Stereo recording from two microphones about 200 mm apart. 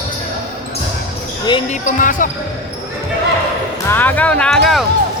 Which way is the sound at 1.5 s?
25° left (ahead or behind).